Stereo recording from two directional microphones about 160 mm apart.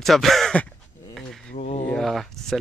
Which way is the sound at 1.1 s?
Centre (ahead or behind).